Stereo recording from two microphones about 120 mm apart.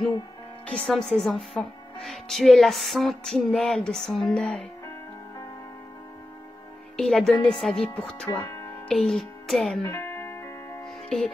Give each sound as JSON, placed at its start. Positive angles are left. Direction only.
{"t": 0.7, "sound": "a woman's voice", "side_deg": 10}
{"t": 7.0, "sound": "a woman's voice", "side_deg": 5}
{"t": 8.3, "sound": "speech", "side_deg": 30}
{"t": 8.8, "sound": "a child's voice", "side_deg": 5}
{"t": 9.8, "sound": "music", "side_deg": 20}
{"t": 11.1, "sound": "speech", "side_deg": 5}